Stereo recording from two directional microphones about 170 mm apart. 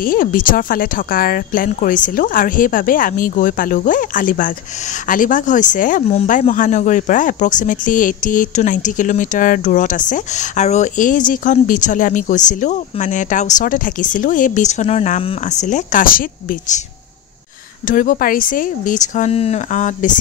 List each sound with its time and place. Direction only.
0.0 s speech: 55° left (ahead or behind)
17.8 s speech: 50° left (ahead or behind)